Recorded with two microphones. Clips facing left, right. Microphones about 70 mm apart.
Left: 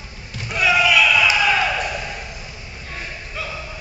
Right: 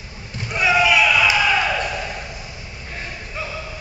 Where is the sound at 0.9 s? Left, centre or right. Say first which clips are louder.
Even; right.